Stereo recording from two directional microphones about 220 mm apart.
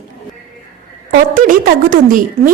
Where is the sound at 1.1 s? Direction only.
40° right (ahead or behind).